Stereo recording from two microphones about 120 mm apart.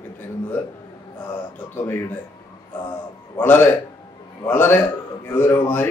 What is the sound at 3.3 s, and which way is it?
A man's voice, 15° left (ahead or behind).